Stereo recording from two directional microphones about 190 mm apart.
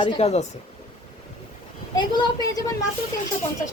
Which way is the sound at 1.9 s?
20° left (ahead or behind).